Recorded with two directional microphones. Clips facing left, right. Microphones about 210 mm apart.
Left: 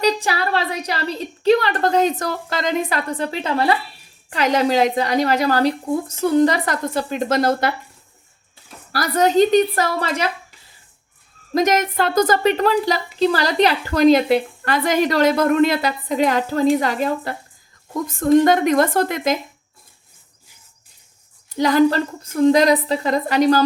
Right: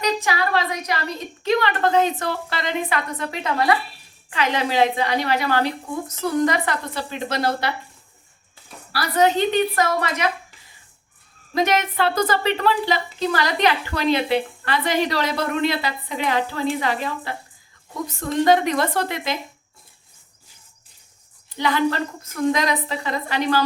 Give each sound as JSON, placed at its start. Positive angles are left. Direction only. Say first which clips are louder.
{"t": 0.0, "sound": "a woman's voice", "louder": "left 3 dB", "side_deg": 35}
{"t": 8.9, "sound": "a woman's voice", "louder": "left 1 dB", "side_deg": 45}
{"t": 11.5, "sound": "a woman's voice", "louder": "left 3 dB", "side_deg": 40}
{"t": 21.6, "sound": "a woman's voice", "louder": "left 6 dB", "side_deg": 40}